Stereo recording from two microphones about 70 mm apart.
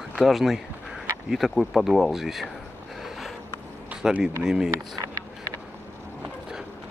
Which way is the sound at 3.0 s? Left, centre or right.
Centre.